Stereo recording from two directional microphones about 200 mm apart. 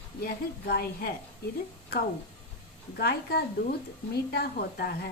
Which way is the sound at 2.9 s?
50° left (ahead or behind).